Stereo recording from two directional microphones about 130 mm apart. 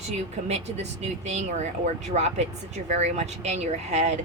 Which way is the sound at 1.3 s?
60° right (ahead or behind).